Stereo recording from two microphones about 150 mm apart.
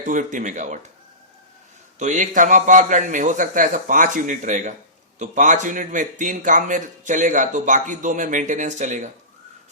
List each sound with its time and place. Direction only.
0.0 s speech: 60° right (ahead or behind)
2.0 s speech: 55° right (ahead or behind)